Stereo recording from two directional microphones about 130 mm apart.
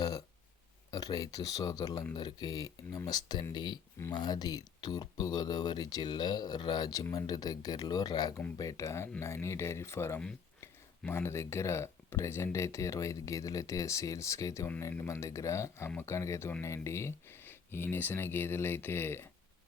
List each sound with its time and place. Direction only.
0.9 s speech: 30° left (ahead or behind)